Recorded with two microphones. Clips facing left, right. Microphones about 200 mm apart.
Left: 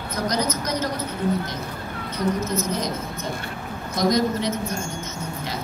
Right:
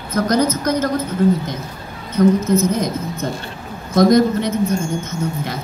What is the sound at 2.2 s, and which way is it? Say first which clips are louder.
Speech: right 11 dB; 50° right (ahead or behind).